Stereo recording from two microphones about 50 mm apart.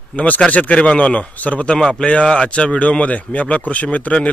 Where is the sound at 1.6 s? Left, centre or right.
Centre.